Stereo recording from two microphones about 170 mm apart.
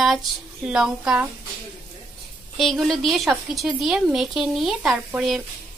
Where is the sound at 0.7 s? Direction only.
5° right (ahead or behind).